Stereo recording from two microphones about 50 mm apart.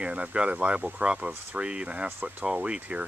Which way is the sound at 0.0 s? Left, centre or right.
Right.